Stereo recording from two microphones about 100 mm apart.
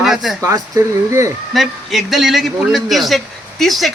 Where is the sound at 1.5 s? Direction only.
Centre (ahead or behind).